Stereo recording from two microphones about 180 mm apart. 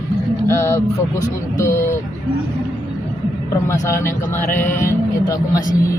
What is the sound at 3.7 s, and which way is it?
Speech, 15° left (ahead or behind).